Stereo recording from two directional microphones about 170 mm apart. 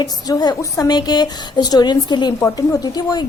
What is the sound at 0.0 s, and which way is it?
A woman's voice, 20° left (ahead or behind).